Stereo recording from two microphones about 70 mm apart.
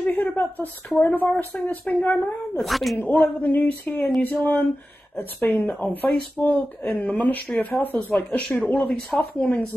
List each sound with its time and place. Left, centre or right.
0.0 s a sound: left
0.9 s speech: left
2.5 s speech: centre
3.0 s speech: left
7.4 s speech: centre
7.8 s speech: left
8.1 s speech: centre